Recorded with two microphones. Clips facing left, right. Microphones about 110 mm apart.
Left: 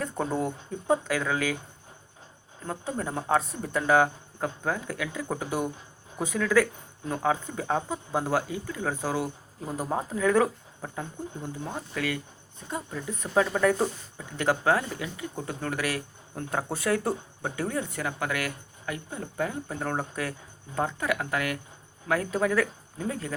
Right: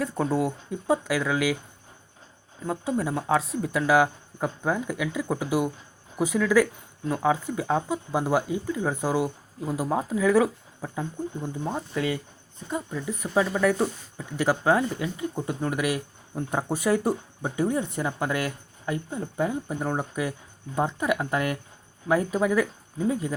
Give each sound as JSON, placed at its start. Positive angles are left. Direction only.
{"t": 0.0, "sound": "speech", "side_deg": -5}
{"t": 2.6, "sound": "speech", "side_deg": -10}
{"t": 9.7, "sound": "speech", "side_deg": -5}
{"t": 11.6, "sound": "speech", "side_deg": -25}
{"t": 12.9, "sound": "speech", "side_deg": -5}